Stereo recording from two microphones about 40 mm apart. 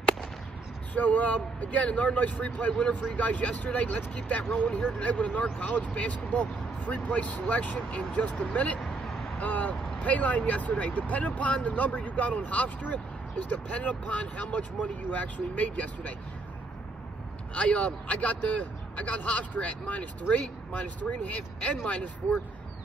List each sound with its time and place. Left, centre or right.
0.9 s speech: left
4.5 s speech: left
4.9 s speech: left
17.6 s speech: left